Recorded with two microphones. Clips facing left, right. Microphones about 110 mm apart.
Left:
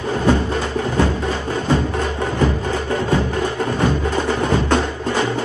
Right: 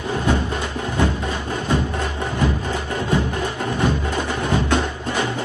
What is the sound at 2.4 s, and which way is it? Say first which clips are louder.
Music: left 3 dB; 15° right (ahead or behind).